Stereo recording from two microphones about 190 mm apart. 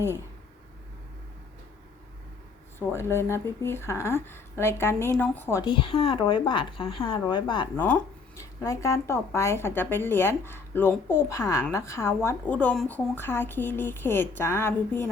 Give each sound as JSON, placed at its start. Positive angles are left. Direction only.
{"t": 2.7, "sound": "speech", "side_deg": 10}
{"t": 5.6, "sound": "a woman's voice", "side_deg": 25}
{"t": 7.8, "sound": "speech", "side_deg": 10}